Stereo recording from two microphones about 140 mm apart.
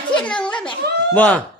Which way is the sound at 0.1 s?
5° left (ahead or behind).